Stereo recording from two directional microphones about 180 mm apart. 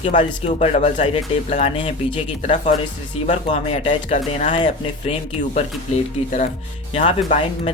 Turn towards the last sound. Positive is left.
turn(degrees=45)  # may be behind; listen again after turning